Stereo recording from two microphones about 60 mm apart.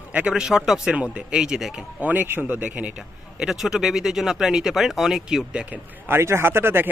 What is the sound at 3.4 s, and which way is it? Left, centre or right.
Speech, centre.